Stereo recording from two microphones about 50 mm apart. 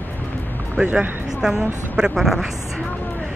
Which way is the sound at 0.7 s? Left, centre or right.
Right.